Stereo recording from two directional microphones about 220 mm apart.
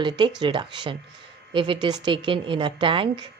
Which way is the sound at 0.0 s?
20° right (ahead or behind).